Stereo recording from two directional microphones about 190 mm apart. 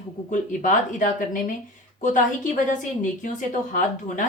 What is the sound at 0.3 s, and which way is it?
A woman's voice, 45° left (ahead or behind).